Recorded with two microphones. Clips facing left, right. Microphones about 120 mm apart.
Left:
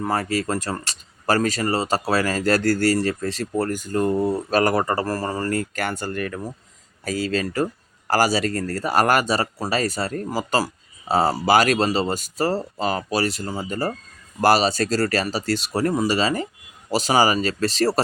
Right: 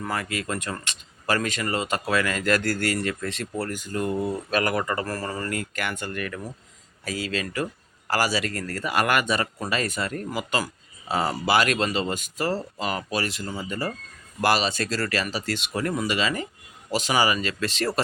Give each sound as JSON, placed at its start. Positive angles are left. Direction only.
{"t": 0.0, "sound": "speech", "side_deg": 35}